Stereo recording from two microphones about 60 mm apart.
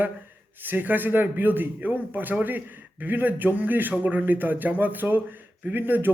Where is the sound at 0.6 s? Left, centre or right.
Right.